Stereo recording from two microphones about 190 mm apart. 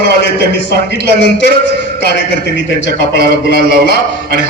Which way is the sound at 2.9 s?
55° right (ahead or behind).